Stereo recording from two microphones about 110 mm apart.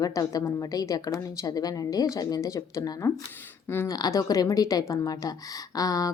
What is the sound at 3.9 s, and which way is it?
A woman's voice, 35° left (ahead or behind).